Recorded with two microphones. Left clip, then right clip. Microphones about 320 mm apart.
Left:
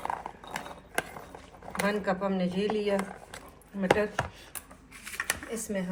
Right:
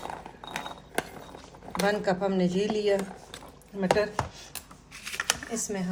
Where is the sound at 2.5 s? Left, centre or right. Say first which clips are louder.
Right 2 dB; right.